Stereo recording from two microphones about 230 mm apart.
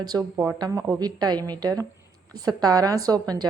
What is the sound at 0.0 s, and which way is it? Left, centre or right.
A woman's voice, centre.